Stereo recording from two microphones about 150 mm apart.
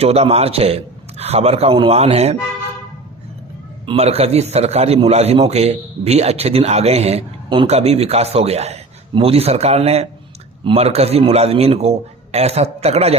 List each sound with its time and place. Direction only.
0.0 s a man's voice: 45° right (ahead or behind)
3.8 s a man's voice: 45° right (ahead or behind)